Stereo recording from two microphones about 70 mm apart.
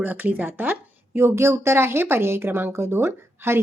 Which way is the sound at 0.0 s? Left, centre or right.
Right.